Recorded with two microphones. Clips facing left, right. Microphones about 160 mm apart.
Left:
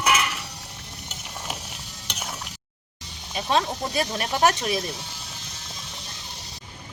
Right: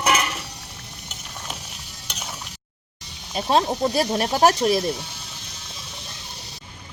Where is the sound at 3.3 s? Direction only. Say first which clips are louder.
Right 4 dB; 35° right (ahead or behind).